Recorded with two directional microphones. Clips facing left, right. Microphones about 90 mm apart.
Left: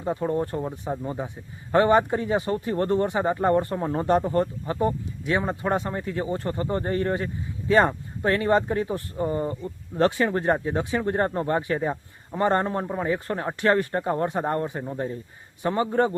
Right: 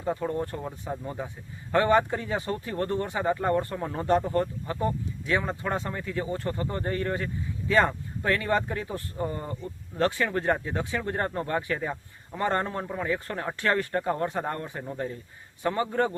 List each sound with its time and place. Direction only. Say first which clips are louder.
0.0 s speech: left 3 dB; 20° left (ahead or behind)